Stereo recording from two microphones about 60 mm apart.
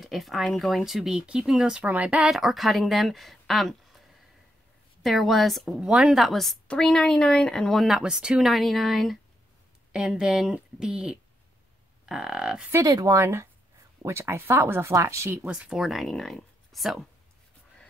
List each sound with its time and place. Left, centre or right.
0.0 s speech: centre
1.8 s speech: right
2.3 s speech: centre
5.0 s a woman's voice: centre
8.0 s speech: centre
8.4 s speech: centre
9.9 s speech: centre
12.8 s speech: right
13.1 s speech: right
15.4 s speech: centre
15.8 s speech: centre